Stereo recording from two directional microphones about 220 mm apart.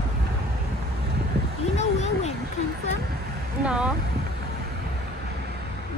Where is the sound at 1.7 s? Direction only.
30° left (ahead or behind).